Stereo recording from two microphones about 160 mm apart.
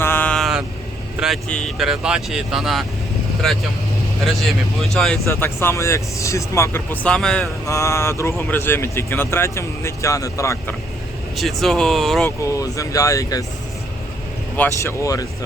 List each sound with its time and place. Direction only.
0.0 s vehicle: 10° left (ahead or behind)
1.2 s speech: 5° left (ahead or behind)
4.8 s speech: centre (ahead or behind)
5.2 s speech: 15° left (ahead or behind)
7.7 s speech: 15° left (ahead or behind)
11.3 s speech: centre (ahead or behind)
12.5 s speech: 20° left (ahead or behind)
14.8 s speech: 20° left (ahead or behind)